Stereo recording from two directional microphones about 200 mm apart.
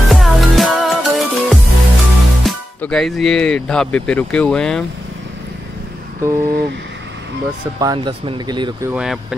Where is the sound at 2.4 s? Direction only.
5° left (ahead or behind).